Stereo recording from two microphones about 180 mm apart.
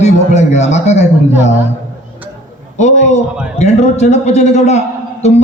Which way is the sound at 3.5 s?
40° left (ahead or behind).